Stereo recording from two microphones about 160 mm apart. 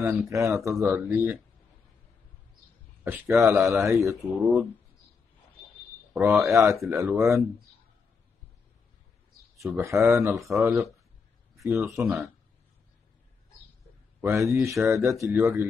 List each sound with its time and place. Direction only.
0.3 s speech: 20° right (ahead or behind)
3.0 s speech: 15° right (ahead or behind)
4.2 s speech: centre (ahead or behind)
6.1 s speech: 15° right (ahead or behind)
9.6 s speech: 20° right (ahead or behind)
14.2 s speech: 15° right (ahead or behind)